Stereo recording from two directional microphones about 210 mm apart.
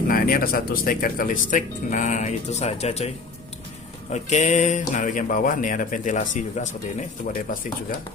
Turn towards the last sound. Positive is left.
turn(degrees=40)  # may be behind; listen again after turning